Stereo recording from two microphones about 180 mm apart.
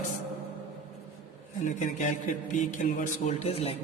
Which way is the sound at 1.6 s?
45° left (ahead or behind).